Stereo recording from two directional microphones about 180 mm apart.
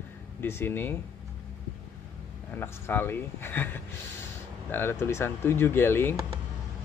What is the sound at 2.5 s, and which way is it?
Speech, 10° left (ahead or behind).